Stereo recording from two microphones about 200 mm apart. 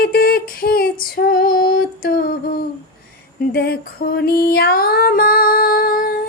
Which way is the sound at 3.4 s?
50° left (ahead or behind).